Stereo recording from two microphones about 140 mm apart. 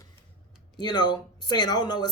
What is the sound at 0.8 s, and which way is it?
Speech, 30° left (ahead or behind).